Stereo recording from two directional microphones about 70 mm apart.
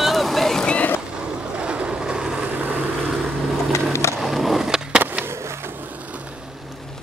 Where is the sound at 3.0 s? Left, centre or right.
Centre.